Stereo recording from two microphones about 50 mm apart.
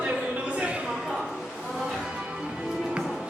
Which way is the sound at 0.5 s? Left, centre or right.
Right.